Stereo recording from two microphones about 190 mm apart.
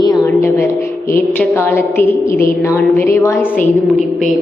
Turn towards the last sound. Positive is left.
turn(degrees=10)  # may be behind; listen again after turning